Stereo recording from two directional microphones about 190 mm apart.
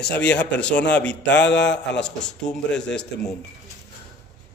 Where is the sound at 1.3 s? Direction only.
65° left (ahead or behind).